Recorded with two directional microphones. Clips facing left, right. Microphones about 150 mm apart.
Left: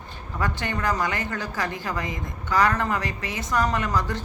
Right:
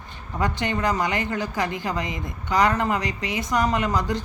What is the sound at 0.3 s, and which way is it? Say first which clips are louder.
A woman's voice: right 3 dB; 20° right (ahead or behind).